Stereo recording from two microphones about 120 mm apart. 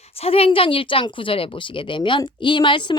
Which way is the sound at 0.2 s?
55° left (ahead or behind).